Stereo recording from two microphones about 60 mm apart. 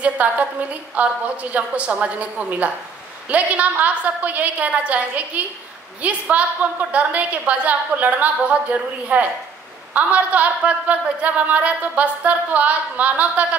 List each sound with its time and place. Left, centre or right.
0.0 s a woman's voice: right